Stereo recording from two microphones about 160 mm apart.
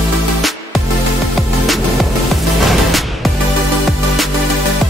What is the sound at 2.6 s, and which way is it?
Music, centre (ahead or behind).